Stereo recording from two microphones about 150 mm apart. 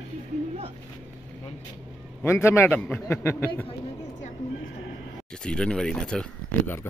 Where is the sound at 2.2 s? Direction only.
15° left (ahead or behind).